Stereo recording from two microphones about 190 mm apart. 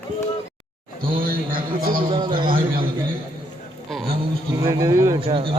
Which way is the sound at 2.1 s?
25° right (ahead or behind).